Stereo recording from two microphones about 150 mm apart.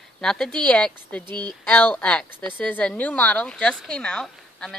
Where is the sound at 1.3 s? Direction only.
30° right (ahead or behind).